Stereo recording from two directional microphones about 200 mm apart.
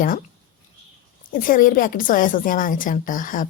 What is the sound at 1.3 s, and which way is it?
A woman's voice, 45° left (ahead or behind).